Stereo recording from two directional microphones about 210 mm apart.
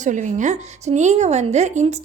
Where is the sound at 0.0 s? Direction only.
35° right (ahead or behind).